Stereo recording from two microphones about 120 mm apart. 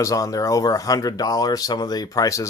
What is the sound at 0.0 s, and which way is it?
Speech, 30° left (ahead or behind).